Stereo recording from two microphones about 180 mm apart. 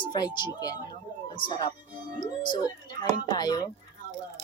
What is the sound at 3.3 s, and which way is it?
Speech, 25° left (ahead or behind).